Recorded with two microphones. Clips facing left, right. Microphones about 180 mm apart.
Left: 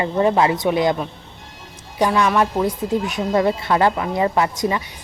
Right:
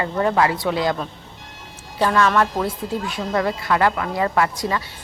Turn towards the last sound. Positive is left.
turn(degrees=20)  # may be behind; listen again after turning